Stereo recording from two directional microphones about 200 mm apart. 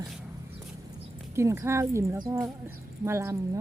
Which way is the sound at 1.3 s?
15° right (ahead or behind).